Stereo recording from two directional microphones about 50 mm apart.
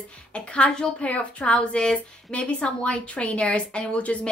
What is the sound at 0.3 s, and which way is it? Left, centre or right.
A woman's voice, left.